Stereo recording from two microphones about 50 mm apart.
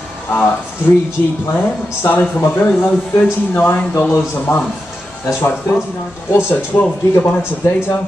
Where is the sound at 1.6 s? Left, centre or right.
Left.